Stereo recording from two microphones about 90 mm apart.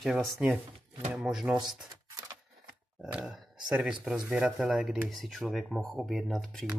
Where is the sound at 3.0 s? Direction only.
5° right (ahead or behind).